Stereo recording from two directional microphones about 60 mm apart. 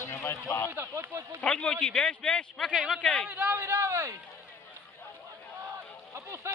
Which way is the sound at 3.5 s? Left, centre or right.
Right.